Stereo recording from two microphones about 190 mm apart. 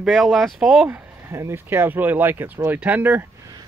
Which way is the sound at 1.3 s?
15° right (ahead or behind).